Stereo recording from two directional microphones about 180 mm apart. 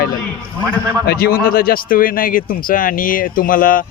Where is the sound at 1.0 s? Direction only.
55° left (ahead or behind).